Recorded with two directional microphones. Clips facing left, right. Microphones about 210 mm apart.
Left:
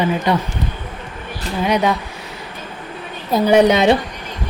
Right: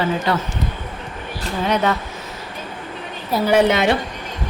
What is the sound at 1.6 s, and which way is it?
Speech, 15° left (ahead or behind).